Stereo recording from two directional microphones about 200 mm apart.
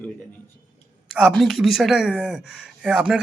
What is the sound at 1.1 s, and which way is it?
A man's voice, centre (ahead or behind).